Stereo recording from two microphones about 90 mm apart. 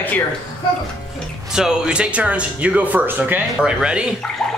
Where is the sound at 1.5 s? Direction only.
5° right (ahead or behind).